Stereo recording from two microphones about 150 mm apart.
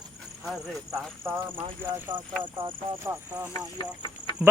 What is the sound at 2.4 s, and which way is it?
Speech, 35° right (ahead or behind).